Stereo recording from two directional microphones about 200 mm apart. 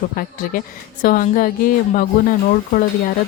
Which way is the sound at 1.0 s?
45° left (ahead or behind).